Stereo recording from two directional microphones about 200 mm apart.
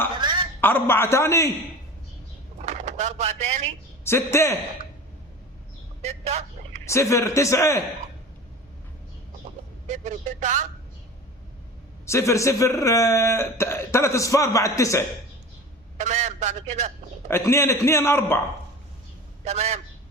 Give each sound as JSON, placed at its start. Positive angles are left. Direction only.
{"t": 0.2, "sound": "a sound", "side_deg": -25}
{"t": 0.6, "sound": "a man's voice", "side_deg": 10}
{"t": 2.6, "sound": "a sound", "side_deg": -35}
{"t": 4.0, "sound": "a man's voice", "side_deg": 15}
{"t": 6.0, "sound": "speech", "side_deg": -35}
{"t": 6.9, "sound": "a man's voice", "side_deg": 15}
{"t": 9.8, "sound": "a man's voice", "side_deg": -35}
{"t": 12.0, "sound": "a man's voice", "side_deg": 15}
{"t": 16.0, "sound": "a man's voice", "side_deg": -35}
{"t": 17.2, "sound": "a man's voice", "side_deg": 10}
{"t": 19.5, "sound": "a man's voice", "side_deg": -30}